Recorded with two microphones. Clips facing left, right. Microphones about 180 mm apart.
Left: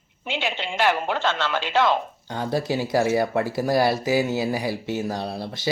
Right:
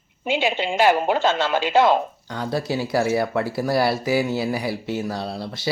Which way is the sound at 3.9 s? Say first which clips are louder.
Even; 45° left (ahead or behind).